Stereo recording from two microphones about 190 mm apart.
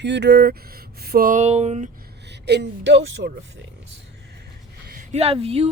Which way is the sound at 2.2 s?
65° right (ahead or behind).